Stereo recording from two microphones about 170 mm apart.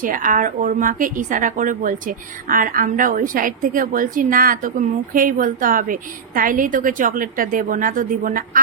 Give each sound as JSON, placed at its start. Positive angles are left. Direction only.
{"t": 0.0, "sound": "a woman's voice", "side_deg": -50}